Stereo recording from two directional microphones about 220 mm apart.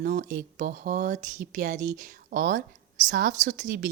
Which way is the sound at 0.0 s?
40° right (ahead or behind).